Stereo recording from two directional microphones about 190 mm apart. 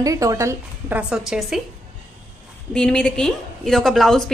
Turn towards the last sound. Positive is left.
turn(degrees=0)  # may be behind; listen again after turning